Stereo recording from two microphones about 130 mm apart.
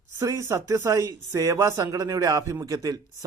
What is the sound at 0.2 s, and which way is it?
Speech, 20° right (ahead or behind).